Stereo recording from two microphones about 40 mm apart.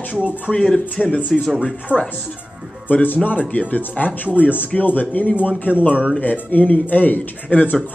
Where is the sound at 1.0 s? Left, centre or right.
Left.